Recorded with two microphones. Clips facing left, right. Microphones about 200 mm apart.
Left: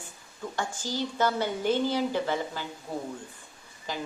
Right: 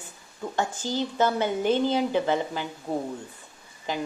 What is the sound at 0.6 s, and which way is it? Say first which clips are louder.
A woman's voice: right 4 dB; 20° right (ahead or behind).